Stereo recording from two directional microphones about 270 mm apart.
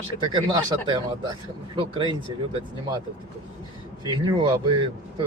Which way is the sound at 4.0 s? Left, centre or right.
Centre.